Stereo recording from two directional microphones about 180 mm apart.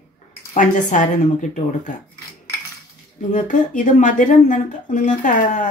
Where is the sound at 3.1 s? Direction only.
45° left (ahead or behind).